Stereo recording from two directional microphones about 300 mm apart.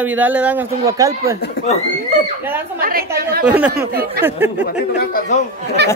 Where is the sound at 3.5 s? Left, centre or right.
Centre.